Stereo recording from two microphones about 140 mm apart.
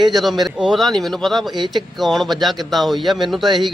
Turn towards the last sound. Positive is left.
turn(degrees=0)  # may be behind; listen again after turning